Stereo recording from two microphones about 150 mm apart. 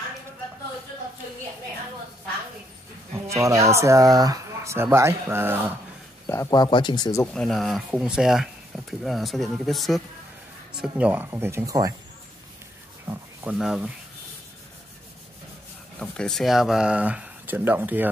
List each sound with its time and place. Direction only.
3.3 s speech: 20° right (ahead or behind)
6.2 s speech: 20° left (ahead or behind)
7.3 s speech: centre (ahead or behind); by 11.9 s 25° right (ahead or behind)
13.0 s rub: 20° right (ahead or behind)
13.5 s speech: 5° right (ahead or behind)
16.0 s speech: 5° left (ahead or behind); by 18.1 s 10° right (ahead or behind)